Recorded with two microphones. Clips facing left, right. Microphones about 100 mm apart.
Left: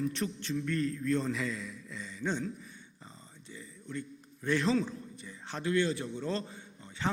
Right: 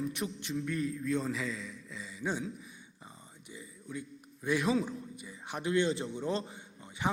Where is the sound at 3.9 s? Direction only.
10° right (ahead or behind).